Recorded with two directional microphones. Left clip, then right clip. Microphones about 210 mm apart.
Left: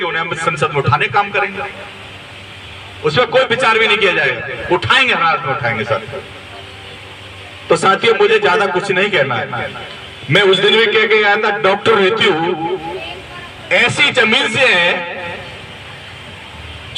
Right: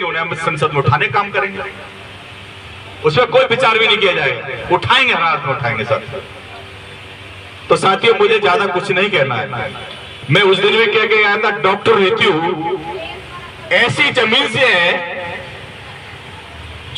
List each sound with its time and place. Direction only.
0.0 s speech: 20° left (ahead or behind)
3.0 s a man's voice: 20° left (ahead or behind)
7.7 s a man's voice: 20° left (ahead or behind)